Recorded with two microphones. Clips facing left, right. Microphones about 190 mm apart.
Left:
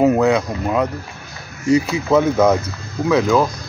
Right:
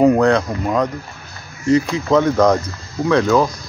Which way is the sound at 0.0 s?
5° left (ahead or behind).